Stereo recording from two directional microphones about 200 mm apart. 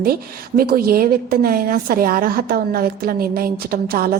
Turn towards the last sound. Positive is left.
turn(degrees=-50)  # may be behind; listen again after turning